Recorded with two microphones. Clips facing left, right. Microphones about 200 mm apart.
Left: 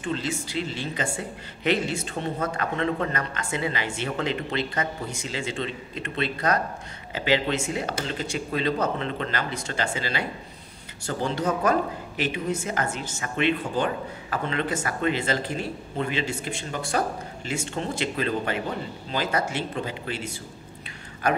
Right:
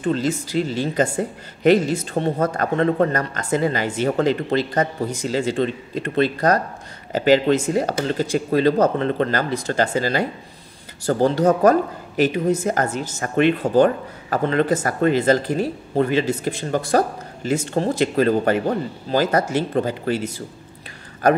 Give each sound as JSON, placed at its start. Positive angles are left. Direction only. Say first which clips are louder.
{"t": 0.0, "sound": "speech", "louder": "right 8 dB", "side_deg": -40}